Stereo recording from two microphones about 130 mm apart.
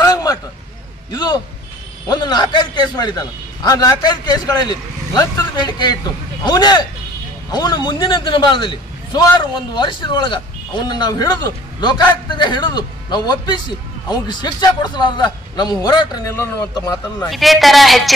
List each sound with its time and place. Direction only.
0.0 s a sound: 30° left (ahead or behind)
1.1 s a man's voice: 30° left (ahead or behind)
17.3 s a woman's voice: centre (ahead or behind)